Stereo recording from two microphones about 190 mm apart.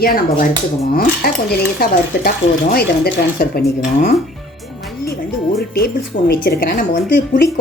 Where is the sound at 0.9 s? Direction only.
55° left (ahead or behind).